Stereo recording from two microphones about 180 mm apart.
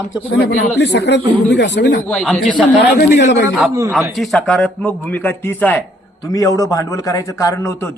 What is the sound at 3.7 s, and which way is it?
Speech, 15° right (ahead or behind).